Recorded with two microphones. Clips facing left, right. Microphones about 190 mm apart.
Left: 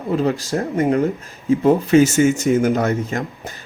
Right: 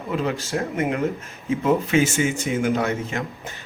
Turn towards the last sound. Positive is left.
turn(degrees=40)  # may be behind; listen again after turning